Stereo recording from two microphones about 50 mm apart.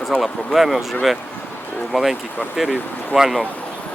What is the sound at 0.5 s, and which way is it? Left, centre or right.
Speech, centre.